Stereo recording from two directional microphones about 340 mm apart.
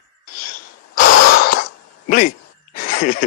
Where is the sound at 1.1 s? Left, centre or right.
Left.